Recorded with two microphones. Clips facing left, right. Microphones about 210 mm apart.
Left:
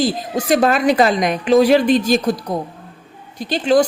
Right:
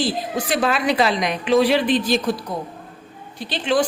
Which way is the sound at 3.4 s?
45° left (ahead or behind).